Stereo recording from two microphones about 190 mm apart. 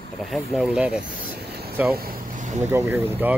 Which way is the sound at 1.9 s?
45° right (ahead or behind).